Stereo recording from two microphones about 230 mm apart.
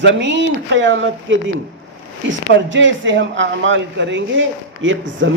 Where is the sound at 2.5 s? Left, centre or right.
Right.